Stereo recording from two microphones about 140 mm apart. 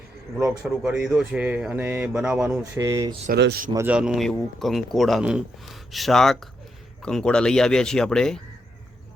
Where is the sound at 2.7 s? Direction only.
25° right (ahead or behind).